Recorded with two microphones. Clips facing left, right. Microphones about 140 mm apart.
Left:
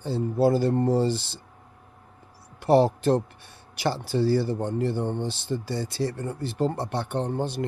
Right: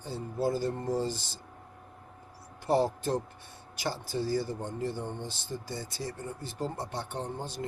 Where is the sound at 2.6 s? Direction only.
70° left (ahead or behind).